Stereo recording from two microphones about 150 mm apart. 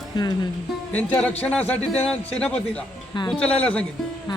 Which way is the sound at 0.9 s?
10° left (ahead or behind).